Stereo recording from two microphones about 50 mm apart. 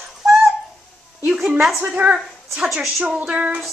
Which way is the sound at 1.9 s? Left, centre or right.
Right.